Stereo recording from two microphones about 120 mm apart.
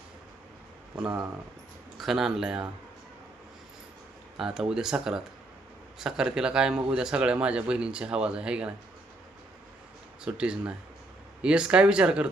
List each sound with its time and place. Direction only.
2.0 s speech: 5° right (ahead or behind)
4.4 s speech: 5° right (ahead or behind)
10.2 s speech: 5° right (ahead or behind)